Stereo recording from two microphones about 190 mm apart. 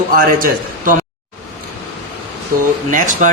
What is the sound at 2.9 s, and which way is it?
Speech, 45° right (ahead or behind).